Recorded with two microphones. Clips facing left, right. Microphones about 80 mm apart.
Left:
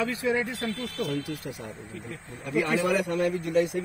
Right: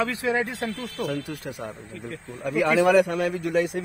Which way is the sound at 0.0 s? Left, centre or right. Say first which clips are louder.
Right 2 dB; right.